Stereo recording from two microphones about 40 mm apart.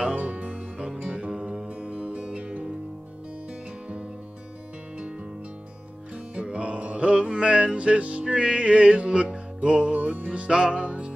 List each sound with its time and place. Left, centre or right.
0.1 s music: right
1.3 s music: centre
1.9 s music: right
6.3 s music: right